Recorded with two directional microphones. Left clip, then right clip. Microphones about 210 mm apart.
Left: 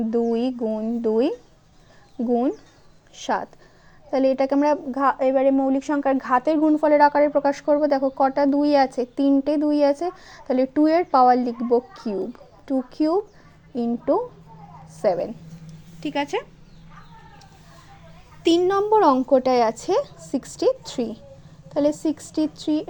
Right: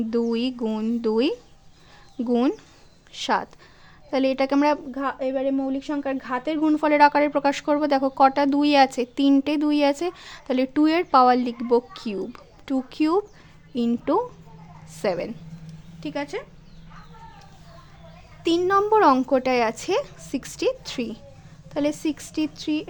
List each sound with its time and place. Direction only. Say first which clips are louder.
0.3 s speech: left 3 dB; 15° right (ahead or behind)
3.2 s speech: right 1 dB; 15° right (ahead or behind)
4.9 s a woman's voice: left 7 dB; centre (ahead or behind)
6.6 s a woman's voice: right 1 dB; 15° right (ahead or behind)
16.0 s speech: left 5 dB; 20° left (ahead or behind)
18.6 s a woman's voice: right 1 dB; centre (ahead or behind)